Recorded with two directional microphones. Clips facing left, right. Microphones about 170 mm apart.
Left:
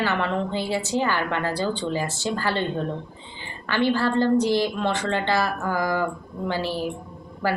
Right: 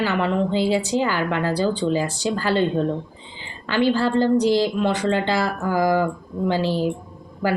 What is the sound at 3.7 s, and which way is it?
A woman's voice, 15° right (ahead or behind).